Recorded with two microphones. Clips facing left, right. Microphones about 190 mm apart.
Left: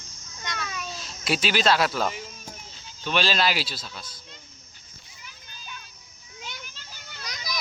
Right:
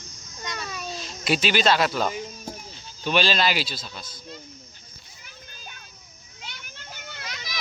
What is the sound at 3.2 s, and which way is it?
Speech, centre (ahead or behind).